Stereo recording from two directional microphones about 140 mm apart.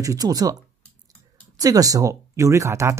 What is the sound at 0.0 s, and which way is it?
Speech, 25° right (ahead or behind).